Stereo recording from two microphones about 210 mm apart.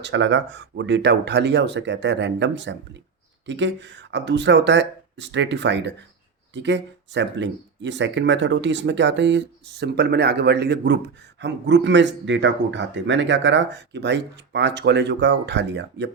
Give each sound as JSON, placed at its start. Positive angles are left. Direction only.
{"t": 0.0, "sound": "speech", "side_deg": -60}